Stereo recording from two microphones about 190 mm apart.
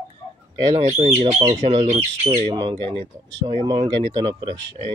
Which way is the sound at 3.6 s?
25° right (ahead or behind).